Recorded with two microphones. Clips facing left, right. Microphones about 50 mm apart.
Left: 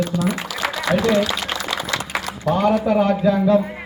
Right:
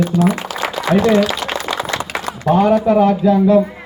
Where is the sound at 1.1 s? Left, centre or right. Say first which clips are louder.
Right 4 dB; right.